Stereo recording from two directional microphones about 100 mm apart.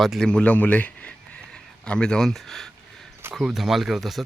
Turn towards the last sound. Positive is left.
turn(degrees=0)  # may be behind; listen again after turning